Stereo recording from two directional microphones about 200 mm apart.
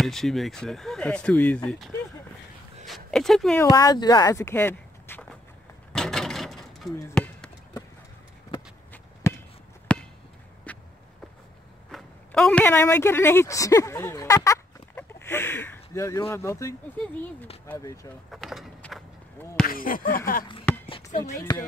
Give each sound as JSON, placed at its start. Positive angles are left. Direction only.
{"t": 0.0, "sound": "speech", "side_deg": 0}
{"t": 2.9, "sound": "speech", "side_deg": 0}
{"t": 3.7, "sound": "speech", "side_deg": 20}
{"t": 5.9, "sound": "a sound", "side_deg": 0}
{"t": 7.0, "sound": "chop", "side_deg": 10}
{"t": 9.3, "sound": "basketball bounce", "side_deg": 15}
{"t": 10.7, "sound": "walk", "side_deg": 5}
{"t": 11.9, "sound": "speech", "side_deg": 0}
{"t": 18.3, "sound": "speech", "side_deg": 0}
{"t": 19.6, "sound": "speech", "side_deg": 45}
{"t": 21.2, "sound": "speech", "side_deg": 15}